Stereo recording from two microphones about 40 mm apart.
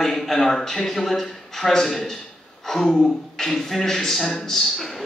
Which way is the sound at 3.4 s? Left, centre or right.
Centre.